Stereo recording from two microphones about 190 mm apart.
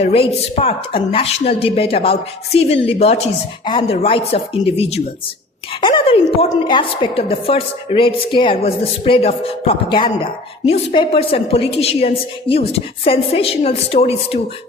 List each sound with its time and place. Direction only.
0.0 s a woman's voice: 30° left (ahead or behind)